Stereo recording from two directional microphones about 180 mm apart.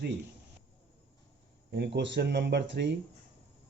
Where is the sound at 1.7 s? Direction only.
70° right (ahead or behind).